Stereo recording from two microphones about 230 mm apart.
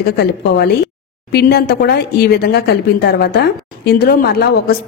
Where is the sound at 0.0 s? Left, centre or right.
Left.